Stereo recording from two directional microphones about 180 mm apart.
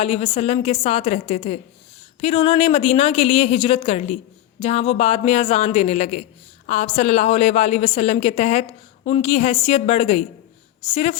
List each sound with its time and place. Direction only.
0.0 s a woman's voice: 35° left (ahead or behind)